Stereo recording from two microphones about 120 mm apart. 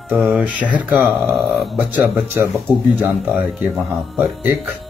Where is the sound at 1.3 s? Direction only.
Centre (ahead or behind).